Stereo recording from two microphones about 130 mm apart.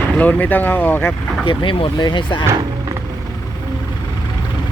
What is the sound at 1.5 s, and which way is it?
Speech, 40° left (ahead or behind).